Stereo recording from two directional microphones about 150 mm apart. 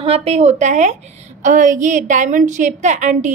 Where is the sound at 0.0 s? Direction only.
45° right (ahead or behind).